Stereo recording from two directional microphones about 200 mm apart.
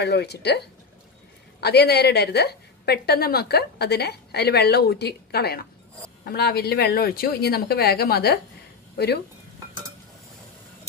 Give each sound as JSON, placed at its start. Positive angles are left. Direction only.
{"t": 0.0, "sound": "a woman's voice", "side_deg": 55}